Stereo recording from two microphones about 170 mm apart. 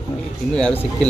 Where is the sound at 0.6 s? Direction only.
5° left (ahead or behind).